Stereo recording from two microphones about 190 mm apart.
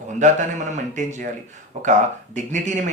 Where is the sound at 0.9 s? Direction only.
40° right (ahead or behind).